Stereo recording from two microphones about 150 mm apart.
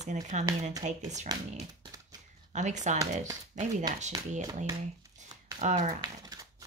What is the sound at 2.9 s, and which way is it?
Speech, 55° right (ahead or behind).